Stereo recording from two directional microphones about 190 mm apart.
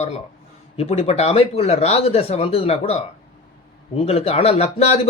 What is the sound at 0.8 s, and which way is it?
Speech, 35° left (ahead or behind).